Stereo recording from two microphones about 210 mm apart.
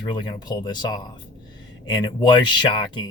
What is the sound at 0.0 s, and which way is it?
Speech, 20° left (ahead or behind).